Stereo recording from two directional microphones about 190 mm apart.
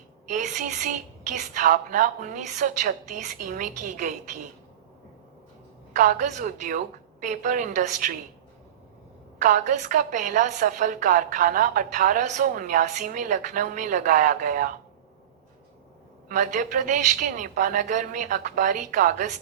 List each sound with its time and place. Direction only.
0.3 s a woman's voice: 40° right (ahead or behind)
6.0 s a woman's voice: 40° right (ahead or behind)
9.4 s a woman's voice: 40° right (ahead or behind)
16.3 s a woman's voice: 40° right (ahead or behind)